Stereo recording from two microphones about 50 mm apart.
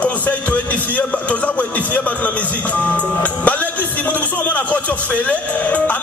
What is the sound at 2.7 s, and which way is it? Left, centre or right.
Speech, left.